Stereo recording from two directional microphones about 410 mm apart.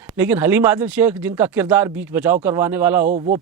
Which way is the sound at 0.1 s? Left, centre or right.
Centre.